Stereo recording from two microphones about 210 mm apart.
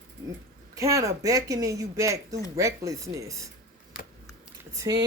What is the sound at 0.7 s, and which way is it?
Speech, 15° right (ahead or behind).